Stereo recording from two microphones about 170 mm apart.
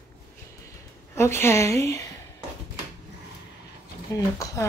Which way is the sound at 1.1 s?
15° left (ahead or behind).